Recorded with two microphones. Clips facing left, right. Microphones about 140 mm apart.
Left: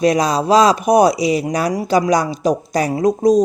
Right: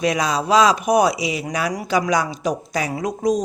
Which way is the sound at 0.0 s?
35° left (ahead or behind).